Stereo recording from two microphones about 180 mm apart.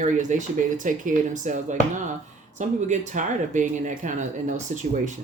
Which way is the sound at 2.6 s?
40° right (ahead or behind).